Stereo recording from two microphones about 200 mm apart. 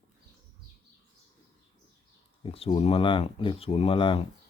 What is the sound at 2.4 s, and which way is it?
Speech, 25° left (ahead or behind).